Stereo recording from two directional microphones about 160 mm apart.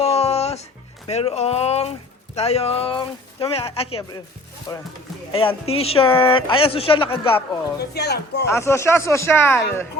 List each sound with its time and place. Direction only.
0.0 s music: 40° left (ahead or behind)
1.0 s speech: 40° left (ahead or behind)
4.7 s speech: 20° left (ahead or behind)
5.3 s speech: 35° left (ahead or behind)
7.8 s speech: 90° left
8.4 s speech: 15° left (ahead or behind)